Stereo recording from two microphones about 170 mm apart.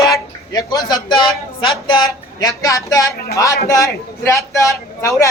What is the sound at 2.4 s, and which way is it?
A woman's voice, 20° left (ahead or behind).